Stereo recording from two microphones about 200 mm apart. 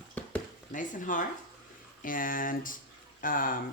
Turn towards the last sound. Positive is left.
turn(degrees=45)  # may be behind; listen again after turning